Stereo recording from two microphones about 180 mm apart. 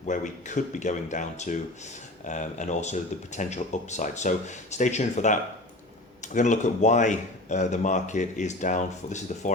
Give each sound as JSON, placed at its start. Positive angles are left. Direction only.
{"t": 0.0, "sound": "speech", "side_deg": 45}